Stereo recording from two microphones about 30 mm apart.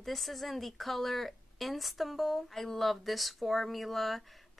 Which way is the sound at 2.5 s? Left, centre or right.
Centre.